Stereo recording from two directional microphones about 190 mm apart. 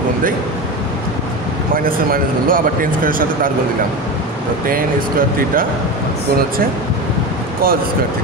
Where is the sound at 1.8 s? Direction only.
50° right (ahead or behind).